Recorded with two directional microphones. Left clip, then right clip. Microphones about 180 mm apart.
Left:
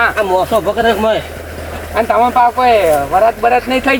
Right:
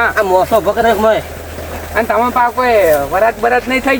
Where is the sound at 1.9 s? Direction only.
10° right (ahead or behind).